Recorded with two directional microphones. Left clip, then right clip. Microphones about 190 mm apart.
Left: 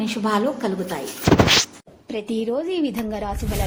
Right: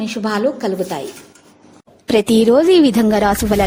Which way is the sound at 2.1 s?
70° right (ahead or behind).